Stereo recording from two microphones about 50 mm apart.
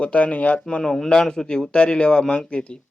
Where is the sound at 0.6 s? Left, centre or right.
Centre.